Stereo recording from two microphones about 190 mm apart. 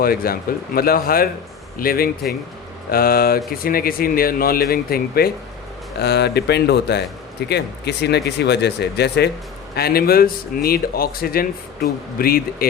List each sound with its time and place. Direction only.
0.0 s a man's voice: 50° left (ahead or behind)